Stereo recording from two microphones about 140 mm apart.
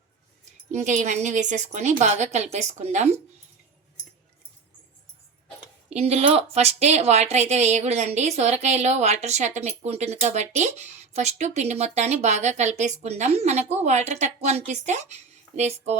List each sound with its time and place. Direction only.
0.7 s a woman's voice: 55° right (ahead or behind)
5.9 s a woman's voice: 50° right (ahead or behind)